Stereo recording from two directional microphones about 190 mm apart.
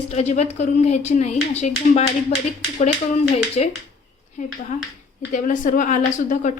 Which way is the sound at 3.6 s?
35° left (ahead or behind).